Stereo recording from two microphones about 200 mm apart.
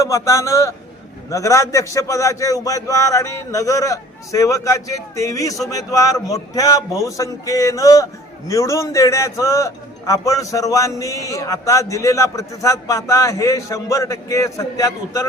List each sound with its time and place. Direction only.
0.0 s a man's voice: 15° left (ahead or behind)